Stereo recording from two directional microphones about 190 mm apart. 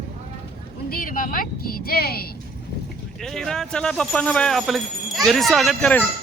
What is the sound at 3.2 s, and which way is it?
Speech, centre (ahead or behind).